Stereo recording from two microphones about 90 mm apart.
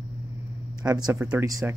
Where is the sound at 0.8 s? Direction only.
40° right (ahead or behind).